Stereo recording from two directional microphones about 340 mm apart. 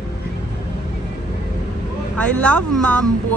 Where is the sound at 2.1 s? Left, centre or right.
Centre.